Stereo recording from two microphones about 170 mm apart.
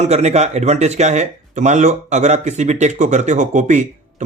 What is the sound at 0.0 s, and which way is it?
Speech, 40° right (ahead or behind).